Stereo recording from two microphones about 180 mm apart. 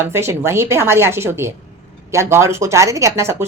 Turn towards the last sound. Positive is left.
turn(degrees=-15)  # may be behind; listen again after turning